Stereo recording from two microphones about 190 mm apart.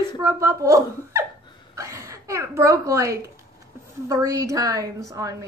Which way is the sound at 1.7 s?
15° right (ahead or behind).